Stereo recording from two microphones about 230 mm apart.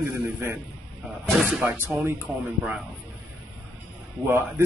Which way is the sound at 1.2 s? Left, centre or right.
Centre.